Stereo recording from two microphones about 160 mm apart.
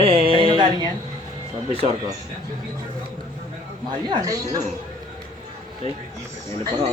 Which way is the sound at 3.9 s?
25° right (ahead or behind).